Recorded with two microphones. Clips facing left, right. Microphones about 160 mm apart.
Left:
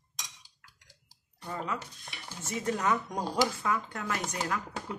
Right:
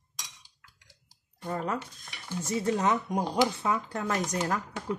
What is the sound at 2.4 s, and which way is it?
Speech, 35° right (ahead or behind).